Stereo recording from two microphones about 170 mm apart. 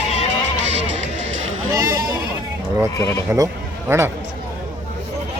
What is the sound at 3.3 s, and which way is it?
Speech, 15° right (ahead or behind).